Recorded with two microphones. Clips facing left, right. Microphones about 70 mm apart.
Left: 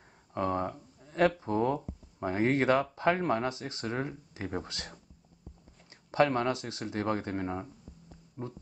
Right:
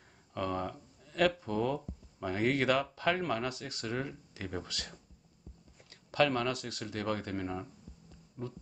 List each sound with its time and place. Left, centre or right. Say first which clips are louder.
0.3 s speech: left 4 dB; left
6.1 s speech: left 3 dB; left